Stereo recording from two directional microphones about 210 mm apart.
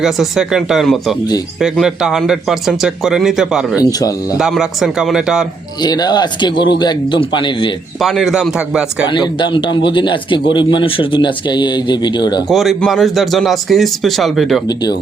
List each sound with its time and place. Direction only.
0.0 s speech: centre (ahead or behind)
3.8 s speech: 15° left (ahead or behind)
4.4 s speech: 5° right (ahead or behind)
5.8 s a man's voice: 20° left (ahead or behind)
7.9 s speech: centre (ahead or behind)
9.0 s a man's voice: 20° left (ahead or behind)
12.5 s speech: centre (ahead or behind)
14.7 s a man's voice: 20° left (ahead or behind)